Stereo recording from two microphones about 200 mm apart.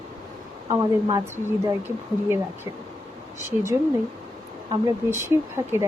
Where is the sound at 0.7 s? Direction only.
15° right (ahead or behind).